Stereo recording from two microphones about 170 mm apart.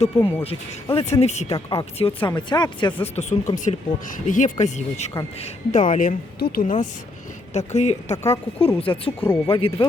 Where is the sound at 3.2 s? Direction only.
45° left (ahead or behind).